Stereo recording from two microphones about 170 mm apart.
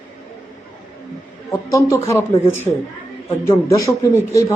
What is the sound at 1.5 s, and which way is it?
A man's voice, 20° left (ahead or behind).